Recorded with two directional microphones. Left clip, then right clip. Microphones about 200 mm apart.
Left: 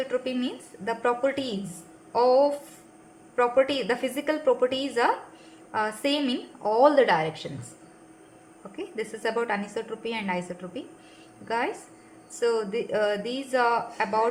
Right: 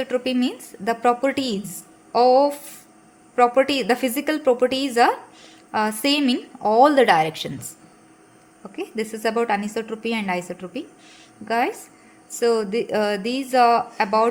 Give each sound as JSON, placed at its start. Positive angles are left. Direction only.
{"t": 0.0, "sound": "a woman's voice", "side_deg": -45}
{"t": 8.7, "sound": "a woman's voice", "side_deg": -45}